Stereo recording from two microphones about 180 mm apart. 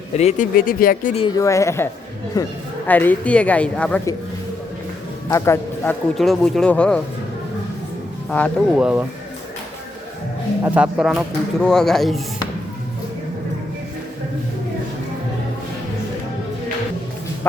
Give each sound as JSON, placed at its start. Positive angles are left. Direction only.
{"t": 0.2, "sound": "speech", "side_deg": 35}
{"t": 0.5, "sound": "speech", "side_deg": 50}
{"t": 1.4, "sound": "a woman's voice", "side_deg": 15}
{"t": 2.8, "sound": "a woman's voice", "side_deg": 10}
{"t": 5.3, "sound": "a man's voice", "side_deg": 15}
{"t": 6.1, "sound": "speech", "side_deg": 0}
{"t": 8.3, "sound": "a woman's voice", "side_deg": 10}
{"t": 8.8, "sound": "speech", "side_deg": -5}
{"t": 10.6, "sound": "speech", "side_deg": -5}